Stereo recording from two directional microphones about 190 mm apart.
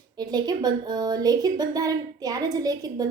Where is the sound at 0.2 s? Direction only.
20° right (ahead or behind).